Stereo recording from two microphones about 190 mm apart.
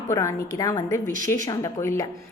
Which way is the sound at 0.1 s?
15° left (ahead or behind).